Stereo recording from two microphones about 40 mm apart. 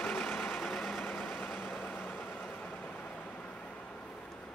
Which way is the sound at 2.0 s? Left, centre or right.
Left.